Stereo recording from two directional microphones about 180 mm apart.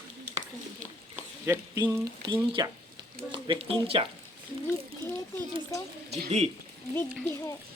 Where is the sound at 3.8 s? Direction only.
30° right (ahead or behind).